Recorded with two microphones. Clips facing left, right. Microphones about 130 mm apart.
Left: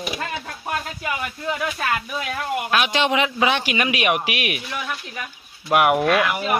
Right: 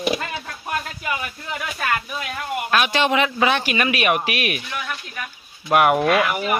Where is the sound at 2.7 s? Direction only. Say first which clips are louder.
Right 2 dB; 15° left (ahead or behind).